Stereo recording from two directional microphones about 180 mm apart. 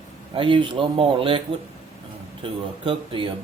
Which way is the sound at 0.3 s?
30° right (ahead or behind).